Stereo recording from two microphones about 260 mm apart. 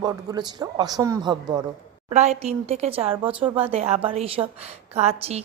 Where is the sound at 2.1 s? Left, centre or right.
Right.